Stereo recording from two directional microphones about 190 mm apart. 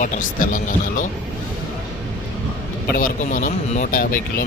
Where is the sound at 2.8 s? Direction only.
45° left (ahead or behind).